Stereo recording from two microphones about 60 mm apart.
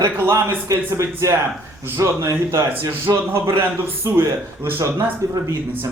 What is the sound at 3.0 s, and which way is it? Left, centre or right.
A man's voice, right.